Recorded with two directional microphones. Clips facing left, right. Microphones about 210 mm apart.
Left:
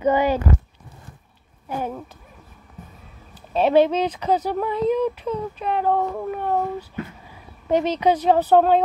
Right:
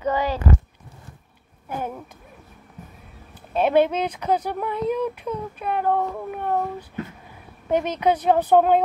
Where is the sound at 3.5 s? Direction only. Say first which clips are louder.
Left 2 dB; 10° right (ahead or behind).